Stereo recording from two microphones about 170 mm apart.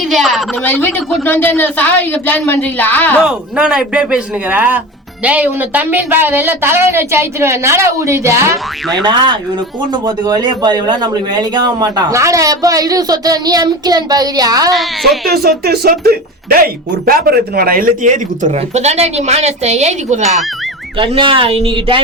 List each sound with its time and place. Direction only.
0.0 s a woman's voice: centre (ahead or behind)
0.6 s a woman's voice: 10° left (ahead or behind)
3.2 s a woman's voice: 5° right (ahead or behind)
9.0 s a man's voice: 25° right (ahead or behind)
14.7 s speech: centre (ahead or behind)
15.3 s speech: 65° right (ahead or behind); by 20.4 s 45° right (ahead or behind)
21.0 s speech: 30° right (ahead or behind)